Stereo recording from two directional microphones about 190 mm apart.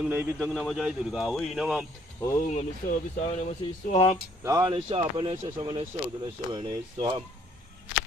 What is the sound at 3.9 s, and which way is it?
Speech, 35° left (ahead or behind).